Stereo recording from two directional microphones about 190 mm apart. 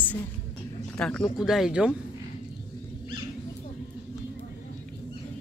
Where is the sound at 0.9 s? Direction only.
5° left (ahead or behind).